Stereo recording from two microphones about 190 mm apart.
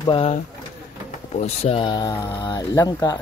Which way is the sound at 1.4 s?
30° left (ahead or behind).